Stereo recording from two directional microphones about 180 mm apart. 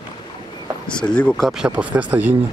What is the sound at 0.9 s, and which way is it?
Speech, 5° left (ahead or behind).